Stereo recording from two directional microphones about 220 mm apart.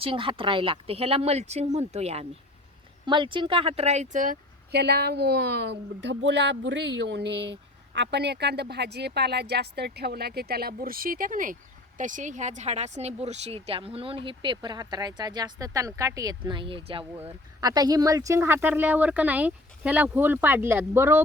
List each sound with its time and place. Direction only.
0.0 s speech: 25° right (ahead or behind)